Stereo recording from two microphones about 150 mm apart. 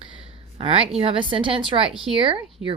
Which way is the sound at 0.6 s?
40° right (ahead or behind).